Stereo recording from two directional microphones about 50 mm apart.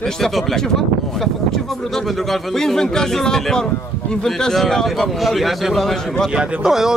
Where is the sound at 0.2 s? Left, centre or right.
Centre.